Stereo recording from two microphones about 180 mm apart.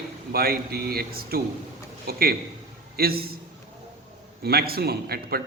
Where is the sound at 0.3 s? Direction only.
60° right (ahead or behind).